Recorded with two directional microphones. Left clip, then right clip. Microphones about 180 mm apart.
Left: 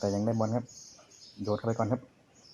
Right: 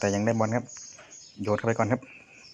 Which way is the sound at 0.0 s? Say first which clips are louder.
Right 5 dB; 20° right (ahead or behind).